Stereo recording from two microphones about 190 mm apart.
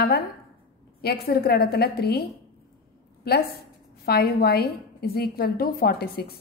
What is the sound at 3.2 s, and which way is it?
A woman's voice, 55° left (ahead or behind).